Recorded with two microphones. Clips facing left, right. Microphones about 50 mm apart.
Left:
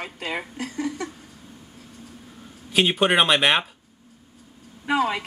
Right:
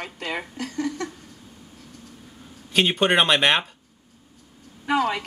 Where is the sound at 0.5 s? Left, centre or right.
Left.